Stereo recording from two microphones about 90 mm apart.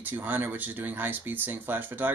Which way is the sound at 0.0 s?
20° right (ahead or behind).